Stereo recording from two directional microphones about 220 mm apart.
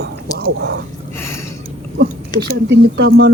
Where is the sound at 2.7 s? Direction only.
50° right (ahead or behind).